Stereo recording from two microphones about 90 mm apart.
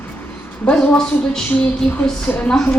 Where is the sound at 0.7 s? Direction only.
10° left (ahead or behind).